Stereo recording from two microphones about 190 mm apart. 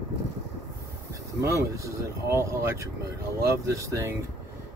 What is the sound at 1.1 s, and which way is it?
Speech, 15° right (ahead or behind).